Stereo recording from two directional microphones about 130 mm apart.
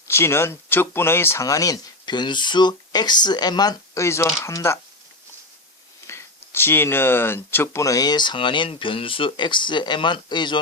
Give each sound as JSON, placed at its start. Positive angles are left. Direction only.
{"t": 0.1, "sound": "speech", "side_deg": 20}
{"t": 6.1, "sound": "speech", "side_deg": 20}